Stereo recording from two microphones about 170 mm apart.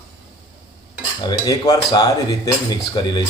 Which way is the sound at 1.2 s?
25° left (ahead or behind).